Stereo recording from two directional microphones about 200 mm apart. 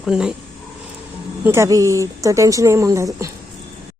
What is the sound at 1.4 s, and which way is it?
Speech, 15° right (ahead or behind).